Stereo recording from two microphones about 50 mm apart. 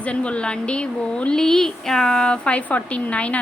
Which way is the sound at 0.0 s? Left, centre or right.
Left.